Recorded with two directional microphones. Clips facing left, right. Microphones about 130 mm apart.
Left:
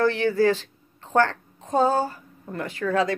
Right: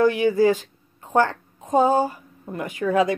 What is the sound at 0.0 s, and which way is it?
A woman's voice, 15° right (ahead or behind).